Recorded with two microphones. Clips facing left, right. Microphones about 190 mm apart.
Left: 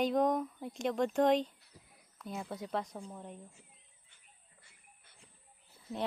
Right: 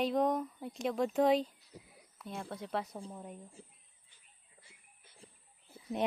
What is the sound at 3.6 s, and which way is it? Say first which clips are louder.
Speech: right 8 dB; 35° right (ahead or behind).